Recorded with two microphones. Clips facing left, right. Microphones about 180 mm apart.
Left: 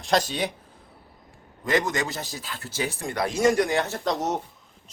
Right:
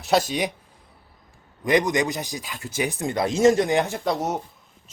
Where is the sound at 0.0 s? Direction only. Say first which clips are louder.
Right 2 dB; 10° right (ahead or behind).